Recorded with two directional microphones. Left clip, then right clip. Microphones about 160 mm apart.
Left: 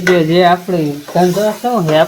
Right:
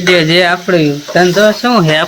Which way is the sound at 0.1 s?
15° right (ahead or behind).